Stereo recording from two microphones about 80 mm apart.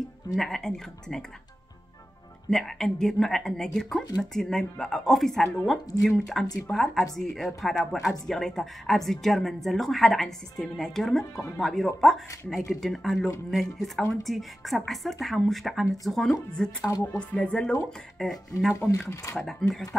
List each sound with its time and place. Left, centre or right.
0.4 s a woman's voice: centre
2.5 s a woman's voice: centre
18.8 s speech: centre
19.7 s speech: centre